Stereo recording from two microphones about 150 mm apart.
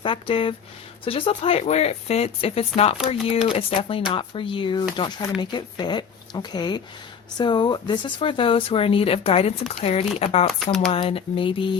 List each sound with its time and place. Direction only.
0.0 s speech: 35° left (ahead or behind)